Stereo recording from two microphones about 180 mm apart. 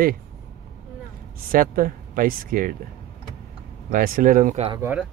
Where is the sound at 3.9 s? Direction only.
50° right (ahead or behind).